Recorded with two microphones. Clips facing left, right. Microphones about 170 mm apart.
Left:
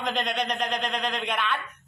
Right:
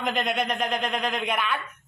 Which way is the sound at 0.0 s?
5° right (ahead or behind).